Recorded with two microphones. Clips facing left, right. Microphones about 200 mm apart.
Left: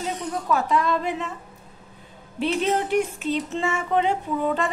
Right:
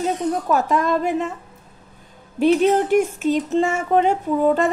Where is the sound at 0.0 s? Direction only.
45° right (ahead or behind).